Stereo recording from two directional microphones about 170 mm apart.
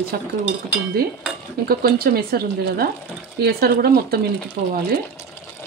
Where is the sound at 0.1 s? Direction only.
65° right (ahead or behind).